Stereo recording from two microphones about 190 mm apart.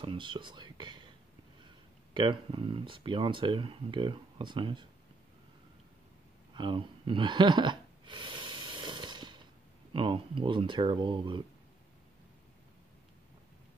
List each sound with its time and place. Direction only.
0.0 s speech: 25° right (ahead or behind)
2.1 s speech: 25° right (ahead or behind)
6.5 s a sound: 25° right (ahead or behind)
9.9 s speech: 25° right (ahead or behind)